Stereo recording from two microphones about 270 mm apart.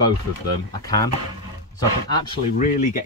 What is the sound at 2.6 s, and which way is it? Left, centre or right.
Speech, left.